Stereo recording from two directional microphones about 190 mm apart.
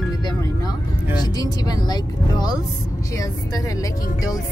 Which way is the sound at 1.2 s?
20° left (ahead or behind).